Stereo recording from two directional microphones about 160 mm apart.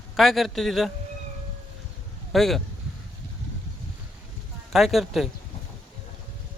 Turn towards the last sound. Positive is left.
turn(degrees=0)  # may be behind; listen again after turning